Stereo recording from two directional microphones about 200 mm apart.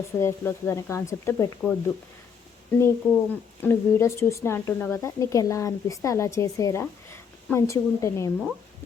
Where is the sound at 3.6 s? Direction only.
15° left (ahead or behind).